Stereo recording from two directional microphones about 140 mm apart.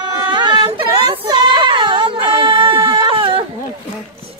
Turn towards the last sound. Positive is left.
turn(degrees=-40)  # may be behind; listen again after turning